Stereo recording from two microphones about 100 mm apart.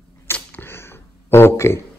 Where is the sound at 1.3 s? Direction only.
25° left (ahead or behind).